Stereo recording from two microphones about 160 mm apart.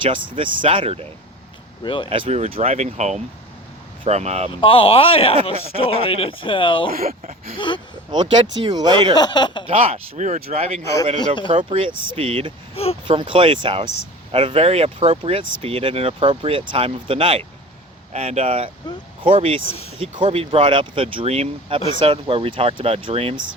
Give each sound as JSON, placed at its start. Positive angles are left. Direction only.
{"t": 0.1, "sound": "speech", "side_deg": -35}
{"t": 1.8, "sound": "speech", "side_deg": 30}
{"t": 2.0, "sound": "speech", "side_deg": -35}
{"t": 4.6, "sound": "speech", "side_deg": 35}
{"t": 6.9, "sound": "speech", "side_deg": -65}
{"t": 7.5, "sound": "speech", "side_deg": 30}
{"t": 8.1, "sound": "speech", "side_deg": -30}
{"t": 9.1, "sound": "speech", "side_deg": 25}
{"t": 9.6, "sound": "speech", "side_deg": -35}
{"t": 12.7, "sound": "speech", "side_deg": 40}
{"t": 13.1, "sound": "speech", "side_deg": -30}
{"t": 19.6, "sound": "speech", "side_deg": 40}
{"t": 20.0, "sound": "speech", "side_deg": -35}